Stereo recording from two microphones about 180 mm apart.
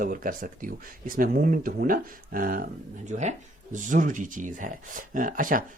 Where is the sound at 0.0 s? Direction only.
50° right (ahead or behind).